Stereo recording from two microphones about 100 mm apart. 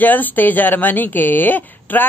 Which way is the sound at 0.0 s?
20° left (ahead or behind).